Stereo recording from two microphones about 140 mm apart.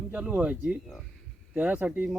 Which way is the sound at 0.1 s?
10° right (ahead or behind).